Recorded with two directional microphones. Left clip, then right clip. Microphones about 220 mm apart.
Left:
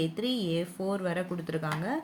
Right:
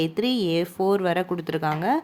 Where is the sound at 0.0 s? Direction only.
45° right (ahead or behind).